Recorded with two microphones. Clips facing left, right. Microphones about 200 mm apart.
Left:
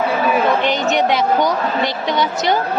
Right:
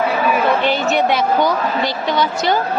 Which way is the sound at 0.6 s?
20° left (ahead or behind).